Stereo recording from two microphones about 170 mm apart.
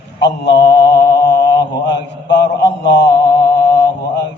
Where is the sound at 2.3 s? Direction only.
85° left.